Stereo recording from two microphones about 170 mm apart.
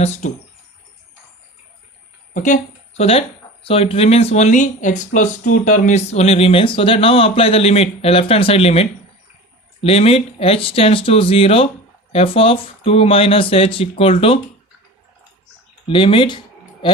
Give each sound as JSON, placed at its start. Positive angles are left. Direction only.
{"t": 0.0, "sound": "speech", "side_deg": 45}
{"t": 2.3, "sound": "speech", "side_deg": 45}
{"t": 3.0, "sound": "speech", "side_deg": 35}
{"t": 15.9, "sound": "speech", "side_deg": 30}